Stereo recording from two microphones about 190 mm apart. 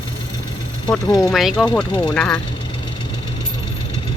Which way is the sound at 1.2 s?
Centre (ahead or behind).